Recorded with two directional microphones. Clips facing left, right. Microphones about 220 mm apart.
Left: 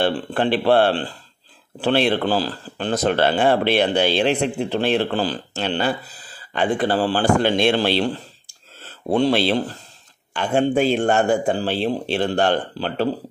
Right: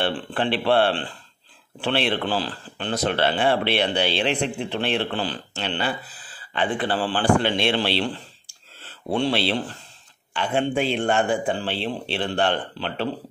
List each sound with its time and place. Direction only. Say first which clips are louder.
0.0 s speech: left 4 dB; 40° left (ahead or behind)